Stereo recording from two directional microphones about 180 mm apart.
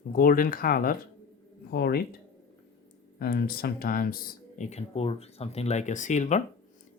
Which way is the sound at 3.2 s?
55° left (ahead or behind).